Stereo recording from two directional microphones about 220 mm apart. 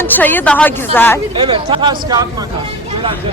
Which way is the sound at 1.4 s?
20° right (ahead or behind).